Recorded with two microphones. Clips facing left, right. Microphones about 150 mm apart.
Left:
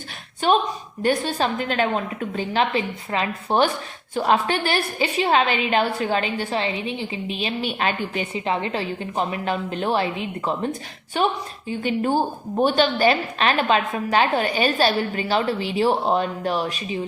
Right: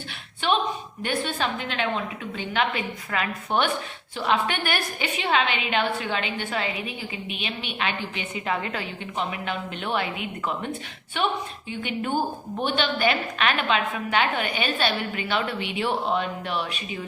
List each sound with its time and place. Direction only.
1.0 s a woman's voice: 35° left (ahead or behind)
8.4 s a woman's voice: 30° left (ahead or behind)